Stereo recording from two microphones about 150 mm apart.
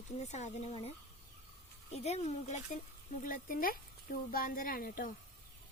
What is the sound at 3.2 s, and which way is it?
Speech, 65° left (ahead or behind).